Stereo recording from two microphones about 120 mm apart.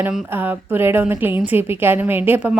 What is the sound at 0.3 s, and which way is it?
A woman's voice, 15° right (ahead or behind).